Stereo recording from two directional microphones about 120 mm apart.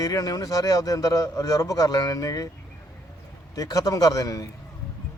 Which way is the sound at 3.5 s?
30° left (ahead or behind).